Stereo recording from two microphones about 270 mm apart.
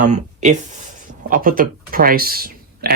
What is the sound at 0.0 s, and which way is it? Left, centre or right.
Speech, right.